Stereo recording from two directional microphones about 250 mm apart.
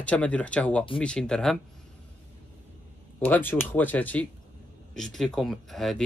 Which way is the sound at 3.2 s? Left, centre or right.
Centre.